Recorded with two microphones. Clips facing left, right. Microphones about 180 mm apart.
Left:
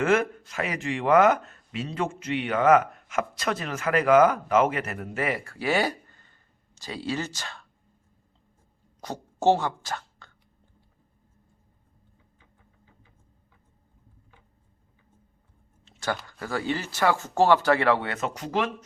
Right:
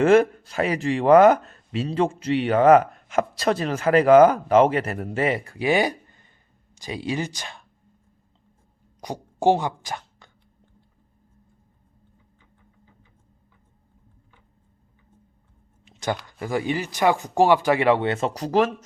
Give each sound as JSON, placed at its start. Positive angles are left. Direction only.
{"t": 0.0, "sound": "speech", "side_deg": -30}
{"t": 9.0, "sound": "speech", "side_deg": -15}
{"t": 15.8, "sound": "a sound", "side_deg": -15}
{"t": 16.4, "sound": "speech", "side_deg": -15}